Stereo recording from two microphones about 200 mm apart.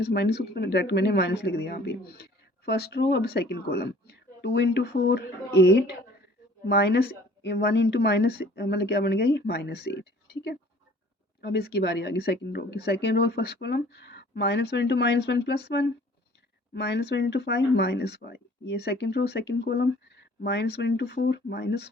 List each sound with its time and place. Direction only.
0.0 s speech: 55° left (ahead or behind)